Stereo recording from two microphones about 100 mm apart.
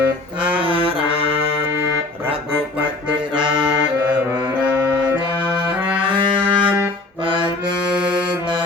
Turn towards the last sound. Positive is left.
turn(degrees=-55)  # may be behind; listen again after turning